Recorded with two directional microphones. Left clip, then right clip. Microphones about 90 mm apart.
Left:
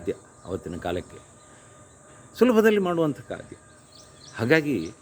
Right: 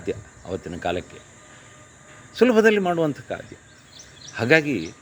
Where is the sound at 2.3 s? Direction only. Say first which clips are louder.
Right 2 dB; 35° left (ahead or behind).